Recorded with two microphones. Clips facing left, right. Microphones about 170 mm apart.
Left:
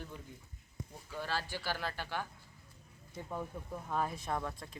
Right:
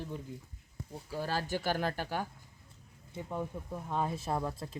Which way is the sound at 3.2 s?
15° right (ahead or behind).